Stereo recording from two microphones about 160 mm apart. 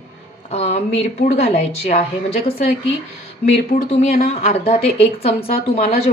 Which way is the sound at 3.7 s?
40° left (ahead or behind).